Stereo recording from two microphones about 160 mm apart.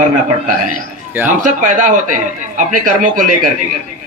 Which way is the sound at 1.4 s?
55° right (ahead or behind).